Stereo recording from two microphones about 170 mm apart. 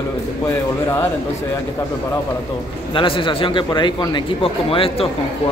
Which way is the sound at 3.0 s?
30° left (ahead or behind).